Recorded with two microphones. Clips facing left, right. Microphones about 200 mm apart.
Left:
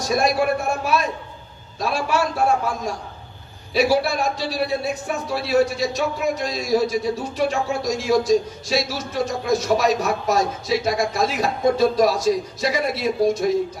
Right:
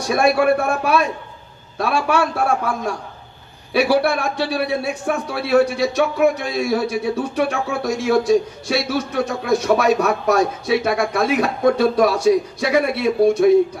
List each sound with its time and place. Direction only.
0.1 s a man's voice: 55° right (ahead or behind)